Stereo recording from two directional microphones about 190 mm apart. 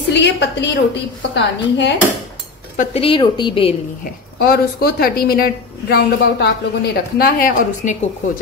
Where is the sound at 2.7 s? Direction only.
30° left (ahead or behind).